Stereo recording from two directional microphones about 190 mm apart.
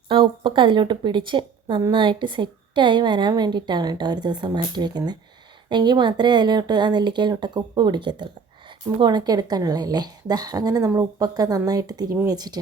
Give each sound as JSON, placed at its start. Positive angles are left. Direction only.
{"t": 0.1, "sound": "a woman's voice", "side_deg": -25}